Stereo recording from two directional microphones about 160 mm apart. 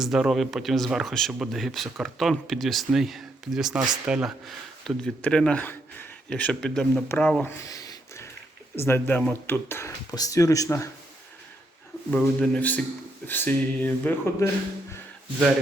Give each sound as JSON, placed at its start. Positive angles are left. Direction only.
{"t": 0.0, "sound": "speech", "side_deg": 0}
{"t": 4.8, "sound": "speech", "side_deg": 5}
{"t": 7.6, "sound": "a sound", "side_deg": 20}
{"t": 8.8, "sound": "speech", "side_deg": 15}
{"t": 12.1, "sound": "speech", "side_deg": 10}